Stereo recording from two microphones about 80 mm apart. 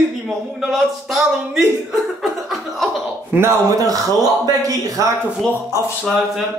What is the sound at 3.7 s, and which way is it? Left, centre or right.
Speech, right.